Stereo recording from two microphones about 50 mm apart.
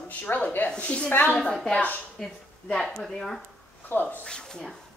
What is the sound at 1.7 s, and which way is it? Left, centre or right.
Speech, left.